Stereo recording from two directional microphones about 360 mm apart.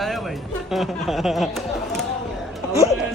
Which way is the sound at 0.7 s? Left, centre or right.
Centre.